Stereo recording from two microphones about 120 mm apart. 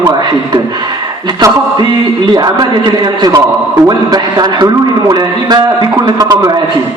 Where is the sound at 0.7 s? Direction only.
35° right (ahead or behind).